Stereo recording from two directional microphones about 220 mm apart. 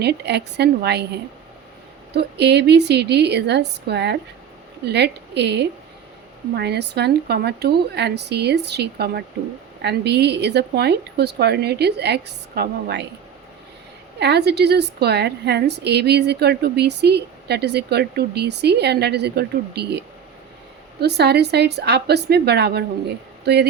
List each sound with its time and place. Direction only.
0.0 s a woman's voice: 50° right (ahead or behind)
2.1 s a woman's voice: 50° right (ahead or behind)
14.2 s a woman's voice: 50° right (ahead or behind)
21.0 s a woman's voice: 45° right (ahead or behind)